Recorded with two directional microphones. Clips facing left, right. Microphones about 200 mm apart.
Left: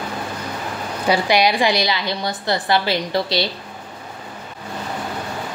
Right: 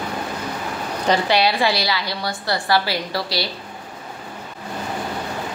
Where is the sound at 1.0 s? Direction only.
10° left (ahead or behind).